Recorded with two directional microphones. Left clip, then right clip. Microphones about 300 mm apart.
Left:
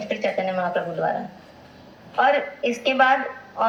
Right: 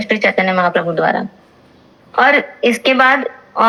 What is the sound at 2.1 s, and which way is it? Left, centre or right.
A woman's voice, right.